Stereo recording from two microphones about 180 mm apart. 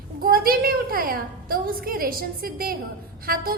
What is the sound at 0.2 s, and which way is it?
A woman's voice, 55° right (ahead or behind).